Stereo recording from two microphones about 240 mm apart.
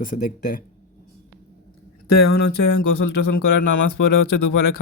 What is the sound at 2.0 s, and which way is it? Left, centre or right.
Speech, left.